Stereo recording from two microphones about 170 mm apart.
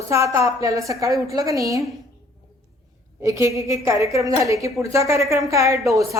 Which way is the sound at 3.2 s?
15° right (ahead or behind).